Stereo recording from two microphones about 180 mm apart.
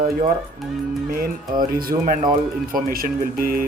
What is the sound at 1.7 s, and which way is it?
Speech, 55° right (ahead or behind).